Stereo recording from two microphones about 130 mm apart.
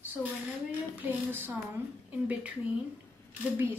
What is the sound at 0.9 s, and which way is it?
Speech, 15° right (ahead or behind).